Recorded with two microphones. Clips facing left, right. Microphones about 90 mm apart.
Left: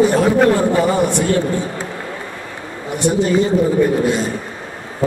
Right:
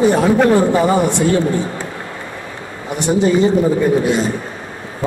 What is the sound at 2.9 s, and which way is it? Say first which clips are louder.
Speech: right 1 dB; 20° right (ahead or behind).